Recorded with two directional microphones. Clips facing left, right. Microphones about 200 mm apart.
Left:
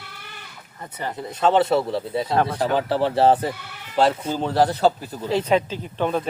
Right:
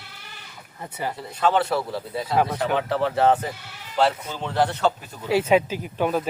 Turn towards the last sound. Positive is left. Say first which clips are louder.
# even
turn(degrees=-5)  # may be behind; listen again after turning